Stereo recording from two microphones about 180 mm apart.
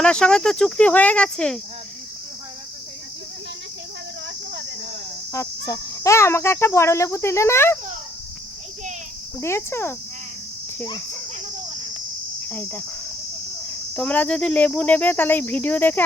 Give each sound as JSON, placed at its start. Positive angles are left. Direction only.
{"t": 0.0, "sound": "speech", "side_deg": 5}
{"t": 5.3, "sound": "speech", "side_deg": 15}
{"t": 9.4, "sound": "speech", "side_deg": 15}
{"t": 12.5, "sound": "speech", "side_deg": 10}
{"t": 13.9, "sound": "speech", "side_deg": 10}